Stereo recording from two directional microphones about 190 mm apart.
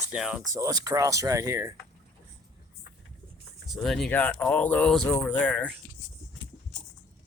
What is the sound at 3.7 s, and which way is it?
Speech, centre (ahead or behind).